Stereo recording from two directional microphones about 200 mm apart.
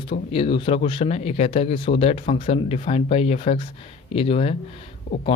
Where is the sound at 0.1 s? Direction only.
25° left (ahead or behind).